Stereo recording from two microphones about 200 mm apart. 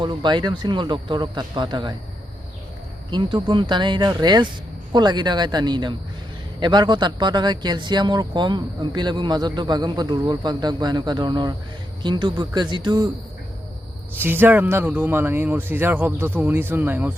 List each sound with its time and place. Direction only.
0.0 s speech: 25° right (ahead or behind)
3.1 s speech: 25° right (ahead or behind)
14.2 s speech: 10° right (ahead or behind)